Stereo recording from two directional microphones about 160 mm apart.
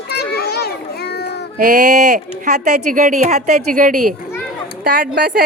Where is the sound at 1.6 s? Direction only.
55° right (ahead or behind).